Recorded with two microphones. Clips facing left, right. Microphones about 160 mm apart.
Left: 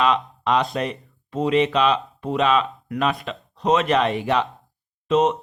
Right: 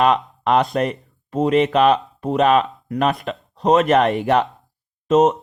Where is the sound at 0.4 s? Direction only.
50° right (ahead or behind).